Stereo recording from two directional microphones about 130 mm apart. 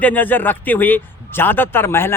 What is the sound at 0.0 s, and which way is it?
Speech, 15° left (ahead or behind).